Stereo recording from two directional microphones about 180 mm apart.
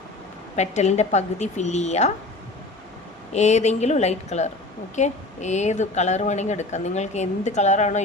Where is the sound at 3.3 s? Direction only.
40° left (ahead or behind).